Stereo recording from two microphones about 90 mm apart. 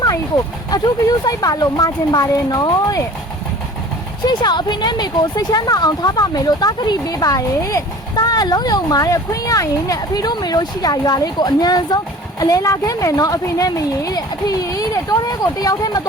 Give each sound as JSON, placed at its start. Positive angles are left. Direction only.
{"t": 0.7, "sound": "speech", "side_deg": 45}
{"t": 4.3, "sound": "speech", "side_deg": 55}